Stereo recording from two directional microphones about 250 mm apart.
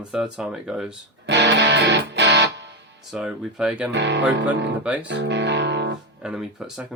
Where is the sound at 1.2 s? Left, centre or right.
Right.